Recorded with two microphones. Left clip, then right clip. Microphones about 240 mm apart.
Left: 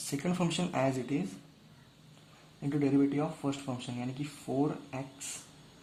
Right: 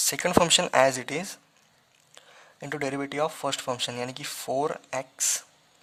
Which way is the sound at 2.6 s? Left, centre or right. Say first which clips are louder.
Left 1 dB; right.